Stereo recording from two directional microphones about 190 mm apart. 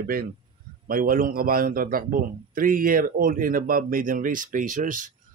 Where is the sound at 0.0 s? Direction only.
50° right (ahead or behind).